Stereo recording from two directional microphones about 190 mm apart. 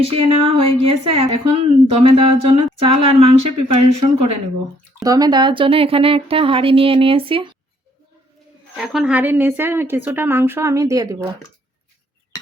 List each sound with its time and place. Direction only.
0.0 s speech: 30° right (ahead or behind)
8.7 s a woman's voice: centre (ahead or behind); by 11.3 s 15° right (ahead or behind)